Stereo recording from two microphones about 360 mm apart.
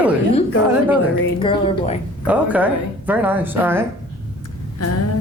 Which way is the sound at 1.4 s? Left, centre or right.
Centre.